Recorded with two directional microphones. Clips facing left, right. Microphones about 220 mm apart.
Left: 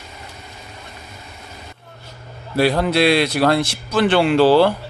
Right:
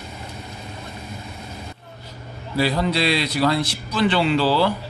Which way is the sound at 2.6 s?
60° left (ahead or behind).